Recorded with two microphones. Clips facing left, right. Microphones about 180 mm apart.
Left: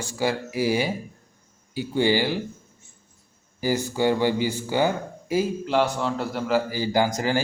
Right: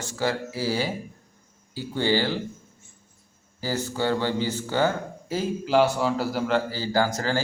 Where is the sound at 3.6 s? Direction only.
10° left (ahead or behind).